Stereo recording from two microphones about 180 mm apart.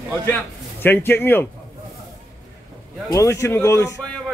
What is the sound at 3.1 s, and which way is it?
Speech, 15° left (ahead or behind).